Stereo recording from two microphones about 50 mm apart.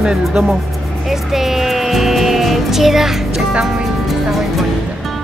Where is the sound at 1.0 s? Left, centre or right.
Centre.